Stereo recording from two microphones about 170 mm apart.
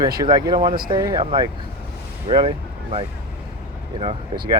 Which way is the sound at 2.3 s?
30° right (ahead or behind).